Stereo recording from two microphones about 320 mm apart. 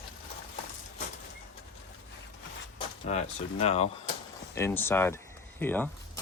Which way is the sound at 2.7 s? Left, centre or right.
Left.